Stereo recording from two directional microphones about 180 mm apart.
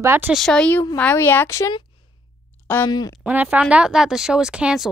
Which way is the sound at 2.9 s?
20° left (ahead or behind).